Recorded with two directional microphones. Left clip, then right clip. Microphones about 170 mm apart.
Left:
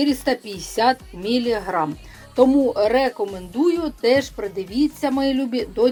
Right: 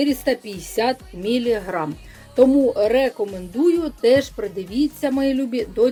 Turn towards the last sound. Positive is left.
turn(degrees=-30)  # may be behind; listen again after turning